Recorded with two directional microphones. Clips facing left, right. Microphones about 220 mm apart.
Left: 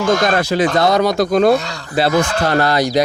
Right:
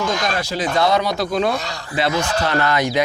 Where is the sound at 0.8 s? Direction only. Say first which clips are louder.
Left 1 dB; 40° left (ahead or behind).